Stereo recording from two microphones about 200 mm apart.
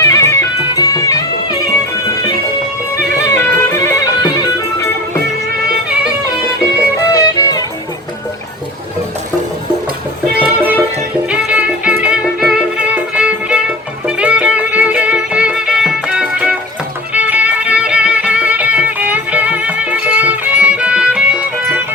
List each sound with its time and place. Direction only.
0.0 s music: 15° left (ahead or behind)
3.3 s music: 10° left (ahead or behind)
7.1 s music: 15° left (ahead or behind)
10.3 s music: 10° right (ahead or behind)